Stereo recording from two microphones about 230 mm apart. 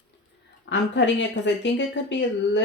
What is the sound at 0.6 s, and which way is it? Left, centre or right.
Speech, left.